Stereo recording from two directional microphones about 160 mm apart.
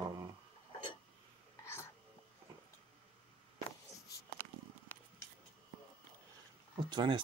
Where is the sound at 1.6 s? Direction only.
15° left (ahead or behind).